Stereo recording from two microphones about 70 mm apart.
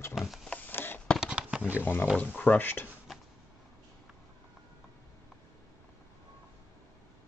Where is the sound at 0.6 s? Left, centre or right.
Left.